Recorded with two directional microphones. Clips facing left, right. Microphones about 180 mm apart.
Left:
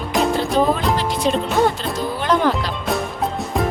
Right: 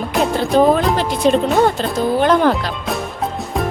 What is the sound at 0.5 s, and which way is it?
Music, 55° right (ahead or behind).